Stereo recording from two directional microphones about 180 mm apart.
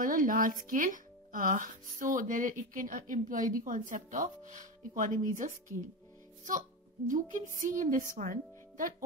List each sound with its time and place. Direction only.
0.0 s speech: 50° right (ahead or behind)
7.1 s speech: 45° right (ahead or behind)